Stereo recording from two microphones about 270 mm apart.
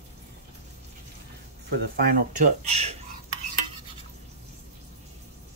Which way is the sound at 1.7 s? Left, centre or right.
Right.